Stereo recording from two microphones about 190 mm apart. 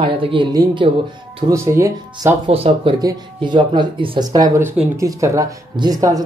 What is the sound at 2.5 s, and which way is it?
Speech, 30° right (ahead or behind).